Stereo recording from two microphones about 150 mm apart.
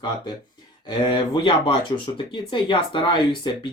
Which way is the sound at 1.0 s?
30° left (ahead or behind).